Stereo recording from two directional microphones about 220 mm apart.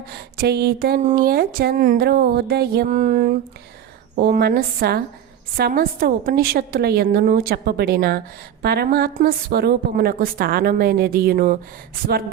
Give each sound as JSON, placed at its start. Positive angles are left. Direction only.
{"t": 0.3, "sound": "a woman's voice", "side_deg": -45}
{"t": 4.1, "sound": "a woman's voice", "side_deg": -45}